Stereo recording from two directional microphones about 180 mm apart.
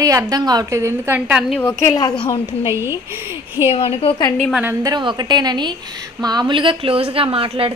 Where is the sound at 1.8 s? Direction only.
20° left (ahead or behind).